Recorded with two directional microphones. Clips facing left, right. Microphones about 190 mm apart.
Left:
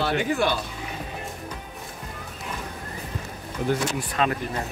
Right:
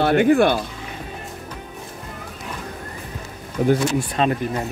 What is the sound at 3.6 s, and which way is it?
Speech, 50° right (ahead or behind).